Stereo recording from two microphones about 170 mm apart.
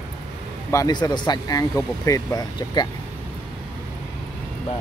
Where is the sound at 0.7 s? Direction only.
20° left (ahead or behind).